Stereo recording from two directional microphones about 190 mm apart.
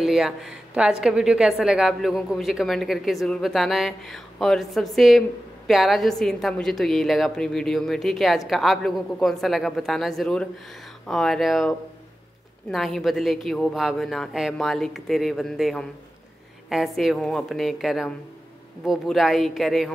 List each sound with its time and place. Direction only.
0.0 s a woman's voice: centre (ahead or behind)
12.7 s a woman's voice: centre (ahead or behind)